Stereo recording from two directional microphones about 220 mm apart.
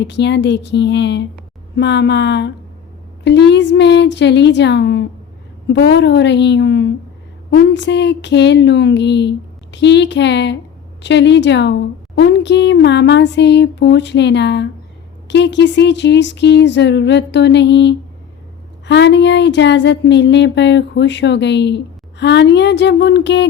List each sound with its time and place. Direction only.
0.0 s a woman's voice: 50° left (ahead or behind)